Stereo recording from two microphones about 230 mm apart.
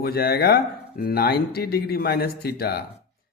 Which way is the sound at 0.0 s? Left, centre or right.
Left.